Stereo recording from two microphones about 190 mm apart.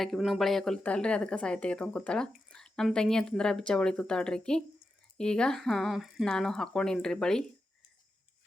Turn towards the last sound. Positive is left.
turn(degrees=5)  # may be behind; listen again after turning